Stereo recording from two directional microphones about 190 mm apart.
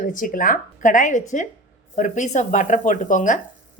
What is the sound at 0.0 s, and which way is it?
A woman's voice, 45° left (ahead or behind).